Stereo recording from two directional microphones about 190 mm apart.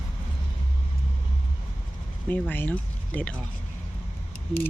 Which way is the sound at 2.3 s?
10° left (ahead or behind).